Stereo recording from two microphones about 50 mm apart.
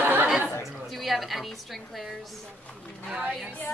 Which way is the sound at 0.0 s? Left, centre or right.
Right.